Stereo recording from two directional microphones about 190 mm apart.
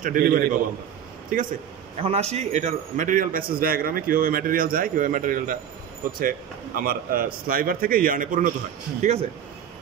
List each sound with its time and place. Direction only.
0.0 s a man's voice: 45° right (ahead or behind)
2.0 s a man's voice: 30° right (ahead or behind)